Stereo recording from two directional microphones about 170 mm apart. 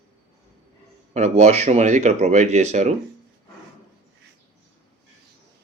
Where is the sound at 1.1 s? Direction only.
40° right (ahead or behind).